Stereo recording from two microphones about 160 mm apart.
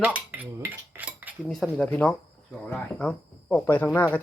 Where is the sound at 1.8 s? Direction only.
10° left (ahead or behind).